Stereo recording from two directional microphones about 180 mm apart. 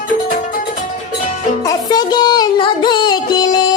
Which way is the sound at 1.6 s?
25° left (ahead or behind).